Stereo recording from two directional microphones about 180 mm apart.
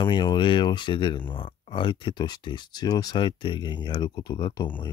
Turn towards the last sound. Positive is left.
turn(degrees=25)  # may be behind; listen again after turning